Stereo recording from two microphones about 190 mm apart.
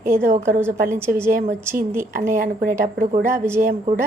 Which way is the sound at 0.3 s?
40° right (ahead or behind).